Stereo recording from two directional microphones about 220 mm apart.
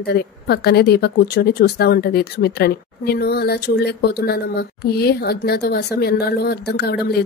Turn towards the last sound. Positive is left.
turn(degrees=45)  # may be behind; listen again after turning